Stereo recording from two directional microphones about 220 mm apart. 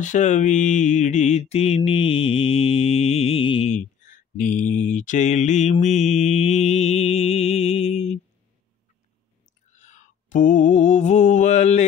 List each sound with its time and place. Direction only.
0.0 s mantra: 35° left (ahead or behind)
9.7 s mantra: 35° left (ahead or behind)